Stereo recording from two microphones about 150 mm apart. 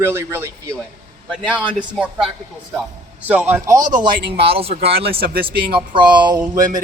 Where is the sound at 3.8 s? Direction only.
60° right (ahead or behind).